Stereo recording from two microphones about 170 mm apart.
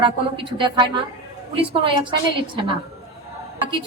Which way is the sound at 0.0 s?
30° right (ahead or behind).